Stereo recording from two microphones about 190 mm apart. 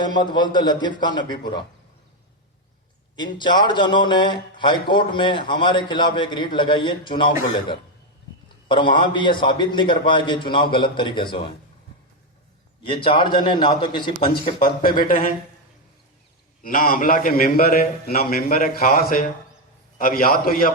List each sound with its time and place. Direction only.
0.0 s a man's voice: 25° left (ahead or behind)
3.3 s a man's voice: 25° left (ahead or behind)
8.7 s a man's voice: 25° left (ahead or behind)
12.8 s a man's voice: 25° left (ahead or behind)
14.9 s a man's voice: 45° left (ahead or behind)
16.6 s a man's voice: 45° left (ahead or behind)